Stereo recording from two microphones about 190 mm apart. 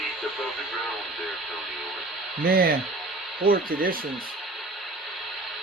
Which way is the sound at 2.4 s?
50° right (ahead or behind).